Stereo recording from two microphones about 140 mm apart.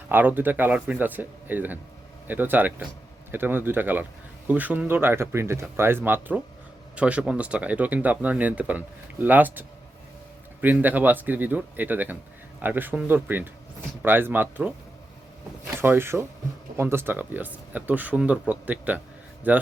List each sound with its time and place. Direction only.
0.1 s speech: 15° right (ahead or behind)
15.8 s speech: 15° right (ahead or behind)